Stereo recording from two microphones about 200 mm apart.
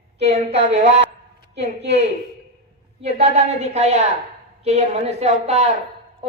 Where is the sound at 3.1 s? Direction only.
35° right (ahead or behind).